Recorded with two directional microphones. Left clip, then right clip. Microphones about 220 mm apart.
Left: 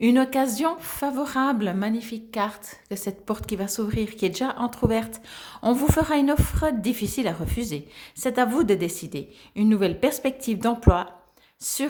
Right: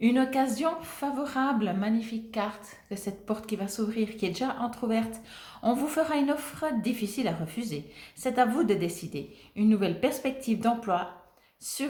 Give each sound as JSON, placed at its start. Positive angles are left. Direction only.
{"t": 0.0, "sound": "a woman's voice", "side_deg": 45}